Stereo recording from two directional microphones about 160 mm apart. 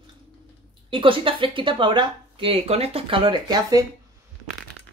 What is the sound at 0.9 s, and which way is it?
Speech, 30° right (ahead or behind).